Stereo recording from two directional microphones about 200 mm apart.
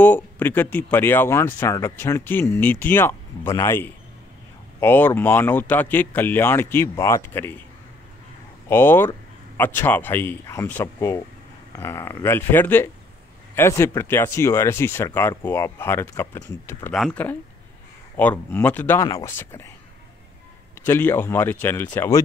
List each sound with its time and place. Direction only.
0.0 s speech: 10° left (ahead or behind)
8.6 s speech: 10° left (ahead or behind)
20.8 s speech: 10° left (ahead or behind)